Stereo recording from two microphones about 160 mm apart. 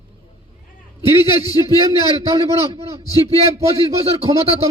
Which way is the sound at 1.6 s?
25° right (ahead or behind).